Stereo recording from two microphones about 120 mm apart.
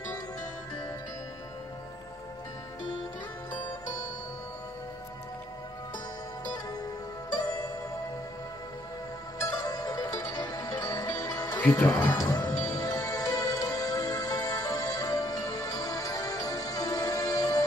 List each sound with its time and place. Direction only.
7.3 s music: 30° left (ahead or behind)
9.4 s music: 30° left (ahead or behind)